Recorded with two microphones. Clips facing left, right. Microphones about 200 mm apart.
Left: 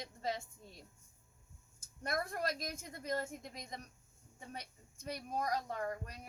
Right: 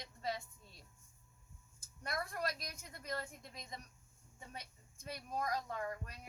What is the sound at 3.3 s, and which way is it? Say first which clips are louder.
Speech: left 5 dB; 45° left (ahead or behind).